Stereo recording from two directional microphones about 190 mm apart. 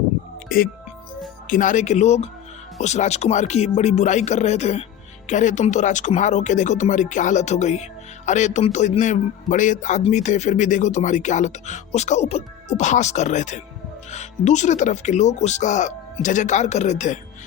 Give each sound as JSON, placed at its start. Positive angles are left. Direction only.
{"t": 0.4, "sound": "speech", "side_deg": 50}